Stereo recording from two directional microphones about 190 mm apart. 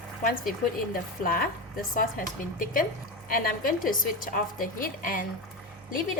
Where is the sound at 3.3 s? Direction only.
50° left (ahead or behind).